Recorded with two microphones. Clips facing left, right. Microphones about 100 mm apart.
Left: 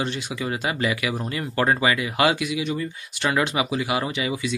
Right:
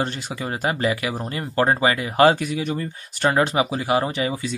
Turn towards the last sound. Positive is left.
turn(degrees=-40)  # may be behind; listen again after turning